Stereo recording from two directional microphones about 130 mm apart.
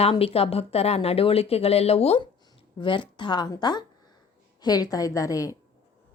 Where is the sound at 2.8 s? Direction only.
40° left (ahead or behind).